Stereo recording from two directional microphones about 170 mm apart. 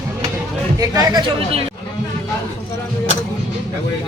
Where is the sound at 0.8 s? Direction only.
20° right (ahead or behind).